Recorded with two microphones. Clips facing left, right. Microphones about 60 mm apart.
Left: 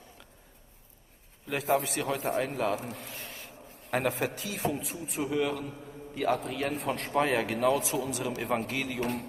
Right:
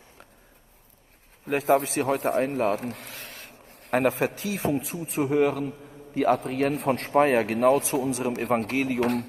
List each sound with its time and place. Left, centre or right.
1.4 s a man's voice: right
4.4 s a man's voice: right
6.9 s a man's voice: right
8.7 s a man's voice: right